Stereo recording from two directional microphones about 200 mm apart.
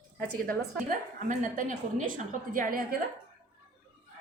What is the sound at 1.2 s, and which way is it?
Speech, 40° right (ahead or behind).